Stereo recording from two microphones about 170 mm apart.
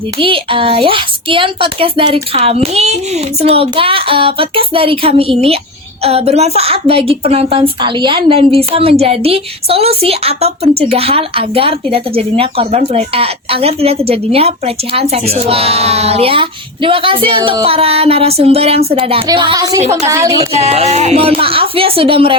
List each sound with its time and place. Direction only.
0.2 s a woman's voice: 30° right (ahead or behind)
20.4 s a woman's voice: 40° right (ahead or behind)